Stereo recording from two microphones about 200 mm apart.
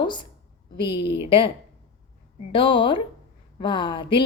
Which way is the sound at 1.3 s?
25° left (ahead or behind).